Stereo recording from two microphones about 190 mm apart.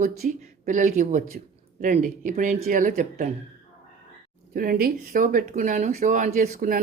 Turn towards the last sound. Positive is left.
turn(degrees=-45)  # may be behind; listen again after turning